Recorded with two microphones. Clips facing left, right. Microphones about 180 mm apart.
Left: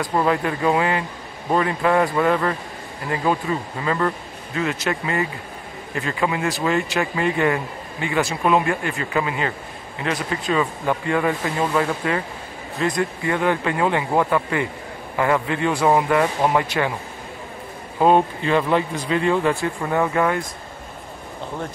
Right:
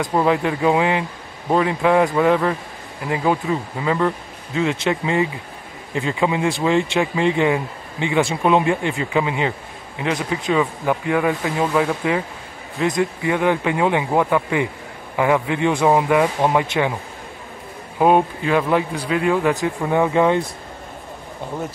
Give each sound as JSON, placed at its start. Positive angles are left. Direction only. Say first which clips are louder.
{"t": 0.1, "sound": "speech", "louder": "right 2 dB", "side_deg": -10}
{"t": 8.2, "sound": "speech", "louder": "right 2 dB", "side_deg": -25}
{"t": 17.9, "sound": "speech", "louder": "right 1 dB", "side_deg": -10}